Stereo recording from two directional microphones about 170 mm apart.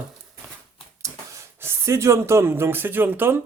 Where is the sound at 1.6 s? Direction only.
15° right (ahead or behind).